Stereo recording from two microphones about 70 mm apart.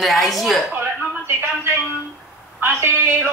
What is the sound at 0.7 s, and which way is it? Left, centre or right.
Speech, right.